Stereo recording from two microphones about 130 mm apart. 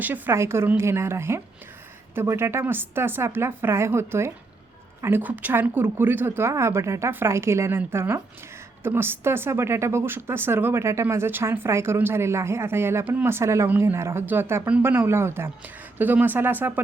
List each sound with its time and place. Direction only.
0.0 s a woman's voice: 15° right (ahead or behind)